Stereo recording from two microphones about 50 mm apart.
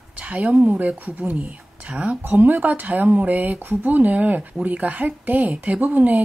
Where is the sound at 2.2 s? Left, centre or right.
Right.